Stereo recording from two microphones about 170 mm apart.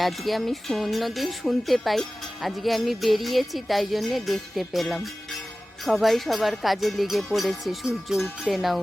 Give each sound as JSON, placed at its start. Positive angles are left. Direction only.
{"t": 0.0, "sound": "speech", "side_deg": 0}